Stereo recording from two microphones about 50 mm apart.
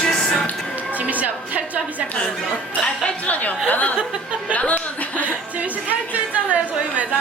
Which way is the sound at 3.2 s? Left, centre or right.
Left.